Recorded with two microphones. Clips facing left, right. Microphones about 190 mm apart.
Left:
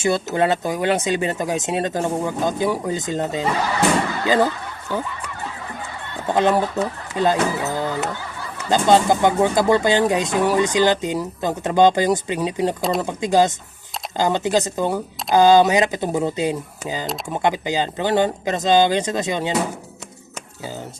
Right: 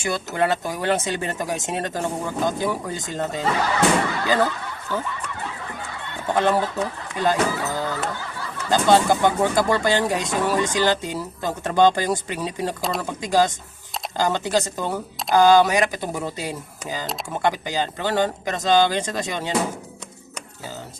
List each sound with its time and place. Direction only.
0.0 s speech: 25° left (ahead or behind)
6.3 s speech: 15° left (ahead or behind)